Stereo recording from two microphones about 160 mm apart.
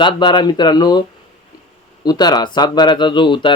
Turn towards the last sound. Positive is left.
turn(degrees=30)  # may be behind; listen again after turning